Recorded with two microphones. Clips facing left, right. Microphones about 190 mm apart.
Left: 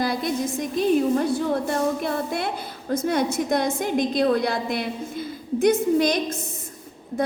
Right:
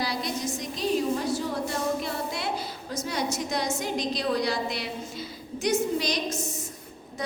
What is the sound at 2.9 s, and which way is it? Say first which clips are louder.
A woman's voice: left 8 dB; 55° left (ahead or behind).